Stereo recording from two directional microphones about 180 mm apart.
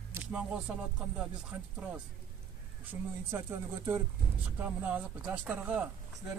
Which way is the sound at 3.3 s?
10° right (ahead or behind).